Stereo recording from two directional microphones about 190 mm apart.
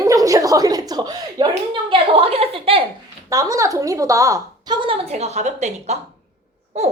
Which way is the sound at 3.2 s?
15° right (ahead or behind).